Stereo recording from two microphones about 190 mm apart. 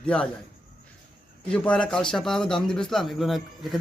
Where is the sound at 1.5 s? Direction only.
5° left (ahead or behind).